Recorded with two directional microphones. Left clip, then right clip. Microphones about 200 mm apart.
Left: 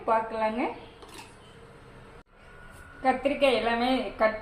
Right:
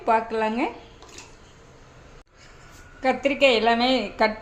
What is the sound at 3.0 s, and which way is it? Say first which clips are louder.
A woman's voice: right 4 dB; 60° right (ahead or behind).